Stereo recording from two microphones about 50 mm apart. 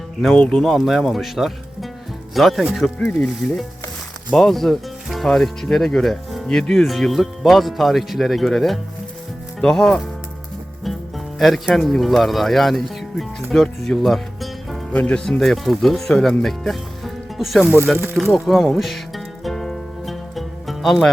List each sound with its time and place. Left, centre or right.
0.3 s speech: centre
0.7 s speech: centre
3.1 s speech: left
4.4 s speech: centre
11.3 s speech: centre
14.9 s speech: left
15.3 s speech: centre
18.8 s music: centre